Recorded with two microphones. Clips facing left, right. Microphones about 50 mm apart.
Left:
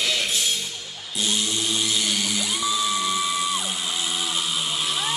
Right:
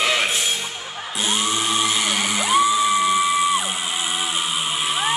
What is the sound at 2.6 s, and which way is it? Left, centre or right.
Music, right.